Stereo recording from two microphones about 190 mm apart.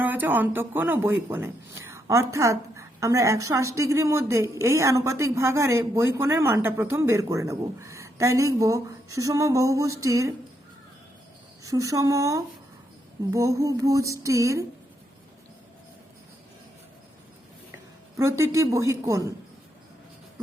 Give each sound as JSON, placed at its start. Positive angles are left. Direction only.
{"t": 0.0, "sound": "speech", "side_deg": -10}
{"t": 11.6, "sound": "speech", "side_deg": -15}
{"t": 18.2, "sound": "speech", "side_deg": -15}